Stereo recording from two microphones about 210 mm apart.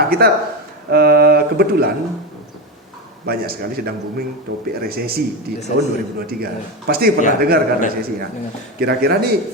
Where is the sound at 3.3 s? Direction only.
45° right (ahead or behind).